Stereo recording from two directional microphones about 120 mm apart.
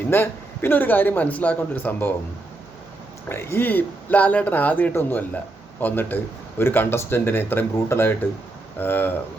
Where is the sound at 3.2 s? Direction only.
20° left (ahead or behind).